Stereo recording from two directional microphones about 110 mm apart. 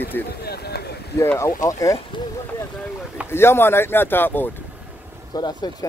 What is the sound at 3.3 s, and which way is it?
Speech, 20° left (ahead or behind).